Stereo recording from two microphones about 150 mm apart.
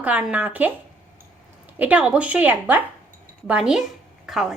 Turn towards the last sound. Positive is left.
turn(degrees=0)  # may be behind; listen again after turning